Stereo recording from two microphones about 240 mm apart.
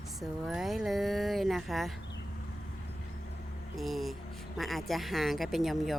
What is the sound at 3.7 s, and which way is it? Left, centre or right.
Speech, centre.